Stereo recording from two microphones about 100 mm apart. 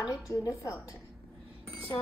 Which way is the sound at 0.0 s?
35° left (ahead or behind).